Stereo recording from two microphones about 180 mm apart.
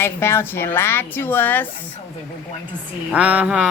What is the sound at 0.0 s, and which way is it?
Speech, 15° left (ahead or behind).